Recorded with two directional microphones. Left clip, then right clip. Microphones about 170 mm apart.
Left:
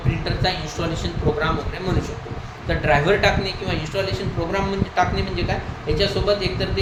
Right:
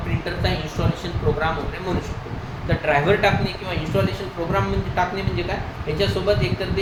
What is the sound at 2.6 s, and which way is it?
Speech, 20° left (ahead or behind).